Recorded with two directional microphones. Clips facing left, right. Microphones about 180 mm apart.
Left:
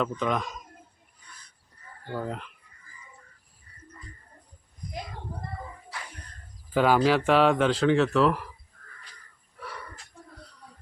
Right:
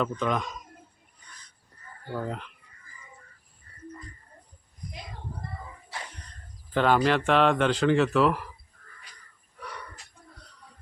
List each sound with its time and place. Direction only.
0.0 s speech: centre (ahead or behind)
2.1 s speech: centre (ahead or behind)
6.7 s speech: 5° left (ahead or behind)
9.6 s a sound: centre (ahead or behind)